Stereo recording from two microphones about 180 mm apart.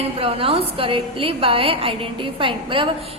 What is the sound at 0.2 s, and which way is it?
A woman's voice, 30° right (ahead or behind).